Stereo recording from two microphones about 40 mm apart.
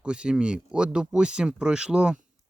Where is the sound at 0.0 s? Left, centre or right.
Right.